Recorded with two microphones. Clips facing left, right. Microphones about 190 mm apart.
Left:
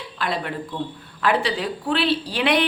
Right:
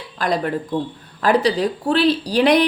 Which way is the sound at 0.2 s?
40° right (ahead or behind).